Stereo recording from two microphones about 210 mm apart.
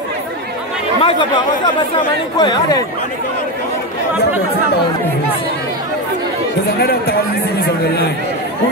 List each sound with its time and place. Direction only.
1.0 s speech: 20° left (ahead or behind)
6.8 s speech: 50° left (ahead or behind)